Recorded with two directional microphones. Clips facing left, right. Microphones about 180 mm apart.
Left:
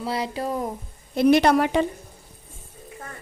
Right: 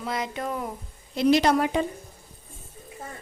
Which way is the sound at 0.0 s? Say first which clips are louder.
Left 3 dB; 30° left (ahead or behind).